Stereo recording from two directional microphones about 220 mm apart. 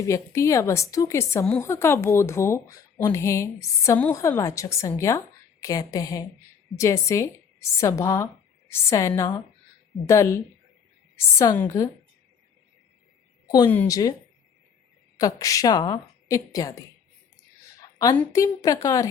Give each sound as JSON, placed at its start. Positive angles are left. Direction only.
{"t": 0.0, "sound": "a woman's voice", "side_deg": 15}
{"t": 13.7, "sound": "a woman's voice", "side_deg": 10}
{"t": 15.2, "sound": "a woman's voice", "side_deg": 15}
{"t": 18.2, "sound": "a woman's voice", "side_deg": 15}